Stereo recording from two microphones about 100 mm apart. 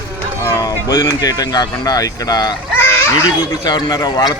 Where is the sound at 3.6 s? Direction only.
45° left (ahead or behind).